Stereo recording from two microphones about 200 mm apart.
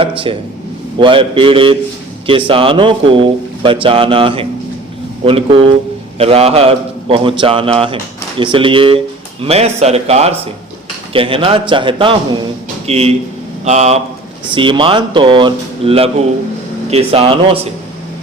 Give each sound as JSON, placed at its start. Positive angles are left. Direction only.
{"t": 0.3, "sound": "a man's voice", "side_deg": -25}